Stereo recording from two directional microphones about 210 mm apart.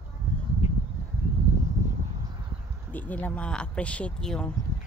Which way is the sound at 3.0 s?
5° left (ahead or behind).